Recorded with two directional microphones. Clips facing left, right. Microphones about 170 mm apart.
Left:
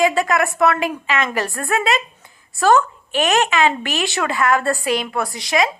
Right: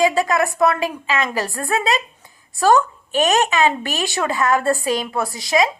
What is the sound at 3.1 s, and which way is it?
Speech, 40° right (ahead or behind).